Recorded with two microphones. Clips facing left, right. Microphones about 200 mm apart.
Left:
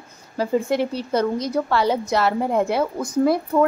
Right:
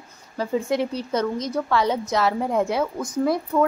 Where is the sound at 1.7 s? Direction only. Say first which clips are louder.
Left 1 dB; 5° left (ahead or behind).